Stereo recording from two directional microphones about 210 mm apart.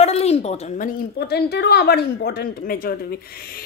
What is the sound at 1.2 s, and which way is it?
A woman's voice, 50° left (ahead or behind).